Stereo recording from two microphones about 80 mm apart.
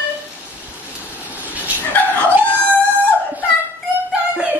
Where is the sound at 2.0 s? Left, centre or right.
Left.